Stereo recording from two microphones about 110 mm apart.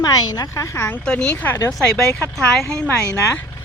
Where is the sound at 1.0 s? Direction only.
10° left (ahead or behind).